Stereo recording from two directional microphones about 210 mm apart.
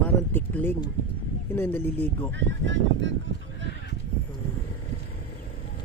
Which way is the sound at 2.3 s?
60° right (ahead or behind).